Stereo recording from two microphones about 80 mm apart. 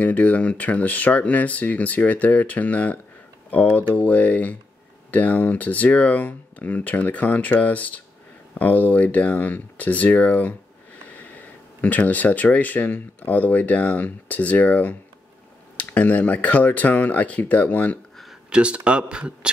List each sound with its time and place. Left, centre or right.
0.0 s speech: centre
18.1 s a sound: centre
18.5 s speech: centre